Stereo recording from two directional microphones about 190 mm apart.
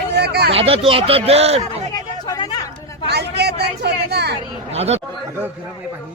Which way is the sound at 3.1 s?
60° right (ahead or behind).